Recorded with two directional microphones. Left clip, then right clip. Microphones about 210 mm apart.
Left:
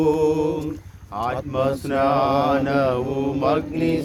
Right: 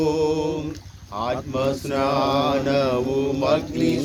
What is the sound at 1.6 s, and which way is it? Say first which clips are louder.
Mantra: left 3 dB; 55° left (ahead or behind).